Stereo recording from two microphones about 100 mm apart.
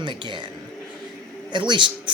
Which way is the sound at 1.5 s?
50° right (ahead or behind).